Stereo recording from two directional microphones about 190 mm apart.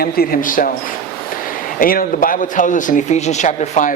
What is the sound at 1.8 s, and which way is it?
A man's voice, 50° left (ahead or behind).